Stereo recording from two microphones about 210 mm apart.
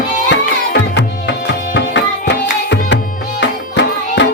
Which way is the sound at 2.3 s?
55° left (ahead or behind).